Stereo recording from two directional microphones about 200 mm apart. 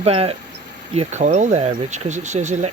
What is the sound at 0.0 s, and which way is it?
Speech, 30° right (ahead or behind).